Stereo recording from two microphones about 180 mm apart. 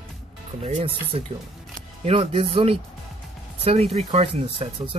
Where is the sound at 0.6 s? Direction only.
35° right (ahead or behind).